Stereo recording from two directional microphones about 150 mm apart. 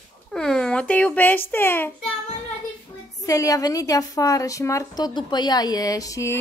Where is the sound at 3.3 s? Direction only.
20° left (ahead or behind).